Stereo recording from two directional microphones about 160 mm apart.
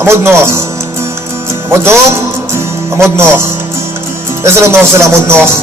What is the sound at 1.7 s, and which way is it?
Speech, 15° right (ahead or behind).